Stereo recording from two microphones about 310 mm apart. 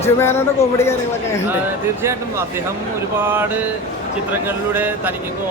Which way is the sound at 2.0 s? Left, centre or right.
Centre.